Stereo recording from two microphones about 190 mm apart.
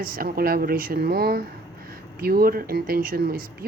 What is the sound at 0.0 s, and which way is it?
A woman's voice, 50° right (ahead or behind).